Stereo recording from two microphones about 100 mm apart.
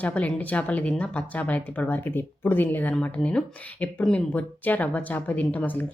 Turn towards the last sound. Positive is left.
turn(degrees=15)  # may be behind; listen again after turning